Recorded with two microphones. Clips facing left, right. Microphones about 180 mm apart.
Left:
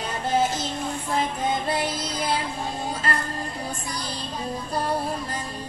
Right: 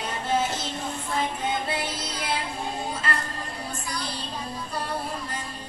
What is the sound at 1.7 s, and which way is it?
Music, 40° left (ahead or behind).